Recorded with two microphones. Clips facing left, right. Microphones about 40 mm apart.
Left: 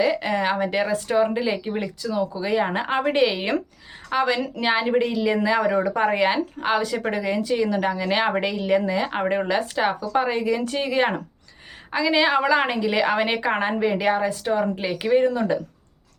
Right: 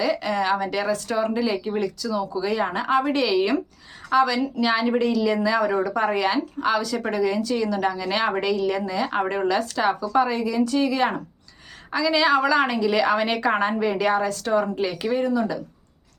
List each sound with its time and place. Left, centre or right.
0.0 s a woman's voice: left
1.5 s speech: centre
1.8 s a woman's voice: left
4.4 s speech: left
4.6 s a woman's voice: left
15.3 s speech: left